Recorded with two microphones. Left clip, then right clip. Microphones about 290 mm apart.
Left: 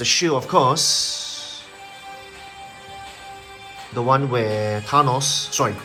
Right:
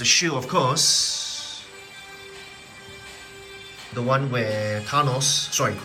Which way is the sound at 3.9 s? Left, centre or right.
Centre.